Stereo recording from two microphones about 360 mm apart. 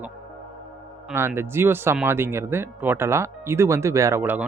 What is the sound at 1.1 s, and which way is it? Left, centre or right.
A man's voice, centre.